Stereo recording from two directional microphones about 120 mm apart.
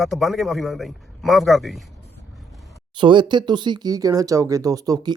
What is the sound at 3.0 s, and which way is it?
Speech, 40° right (ahead or behind).